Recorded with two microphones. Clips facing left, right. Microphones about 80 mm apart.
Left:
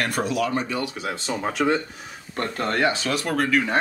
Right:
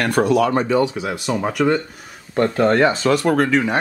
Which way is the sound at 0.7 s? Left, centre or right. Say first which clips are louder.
Right 9 dB; right.